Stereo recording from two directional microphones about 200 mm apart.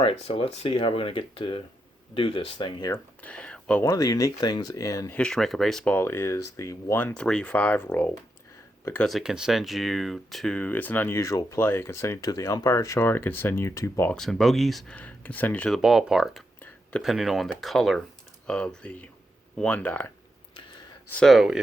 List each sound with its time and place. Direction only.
0.0 s speech: 25° left (ahead or behind)
3.2 s speech: 5° left (ahead or behind)
21.1 s speech: 5° left (ahead or behind)